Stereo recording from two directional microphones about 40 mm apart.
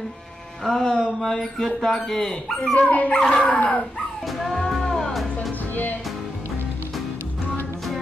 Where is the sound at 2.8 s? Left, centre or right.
Left.